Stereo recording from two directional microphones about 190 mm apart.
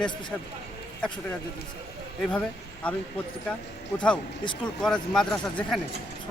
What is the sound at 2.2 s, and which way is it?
Speech, 5° left (ahead or behind).